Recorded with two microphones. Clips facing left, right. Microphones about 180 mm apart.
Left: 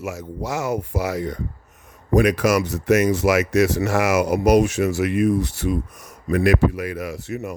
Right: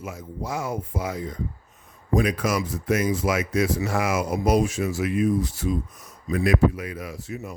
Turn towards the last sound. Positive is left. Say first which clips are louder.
# left 6 dB
turn(degrees=70)  # may be behind; listen again after turning